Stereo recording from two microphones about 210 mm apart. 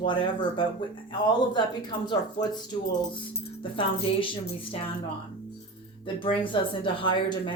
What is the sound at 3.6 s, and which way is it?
Speech, 25° left (ahead or behind).